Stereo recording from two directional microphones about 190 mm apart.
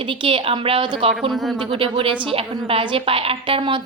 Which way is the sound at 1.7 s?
30° right (ahead or behind).